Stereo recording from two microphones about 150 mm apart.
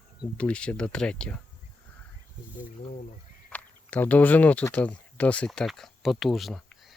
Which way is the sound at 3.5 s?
10° left (ahead or behind).